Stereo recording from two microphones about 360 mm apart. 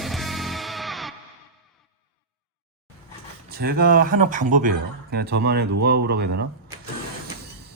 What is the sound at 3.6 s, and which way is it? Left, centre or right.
Speech, right.